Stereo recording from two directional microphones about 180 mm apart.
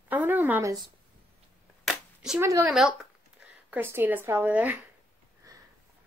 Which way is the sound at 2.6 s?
5° right (ahead or behind).